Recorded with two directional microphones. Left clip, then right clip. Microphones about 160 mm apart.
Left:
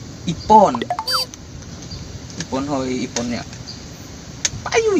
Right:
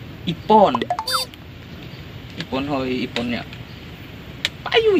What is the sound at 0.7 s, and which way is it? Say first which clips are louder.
Music: even; 5° right (ahead or behind).